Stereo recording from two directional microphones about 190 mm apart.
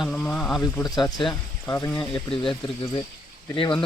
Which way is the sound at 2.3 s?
25° left (ahead or behind).